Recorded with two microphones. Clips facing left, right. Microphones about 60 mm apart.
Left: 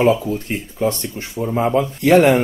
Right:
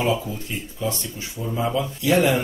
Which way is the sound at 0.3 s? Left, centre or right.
Left.